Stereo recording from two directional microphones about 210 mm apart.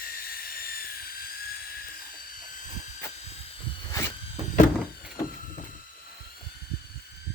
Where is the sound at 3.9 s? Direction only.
10° left (ahead or behind).